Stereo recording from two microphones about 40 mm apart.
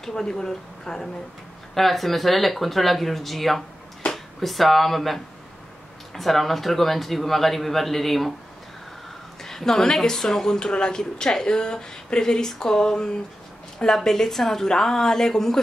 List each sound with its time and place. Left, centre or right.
0.0 s a man's voice: centre
9.4 s speech: centre